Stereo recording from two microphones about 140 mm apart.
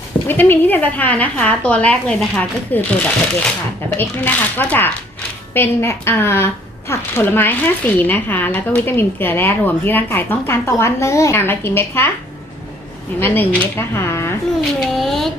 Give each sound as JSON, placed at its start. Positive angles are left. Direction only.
{"t": 0.3, "sound": "a woman's voice", "side_deg": 15}
{"t": 13.1, "sound": "a woman's voice", "side_deg": 15}
{"t": 14.8, "sound": "speech", "side_deg": 0}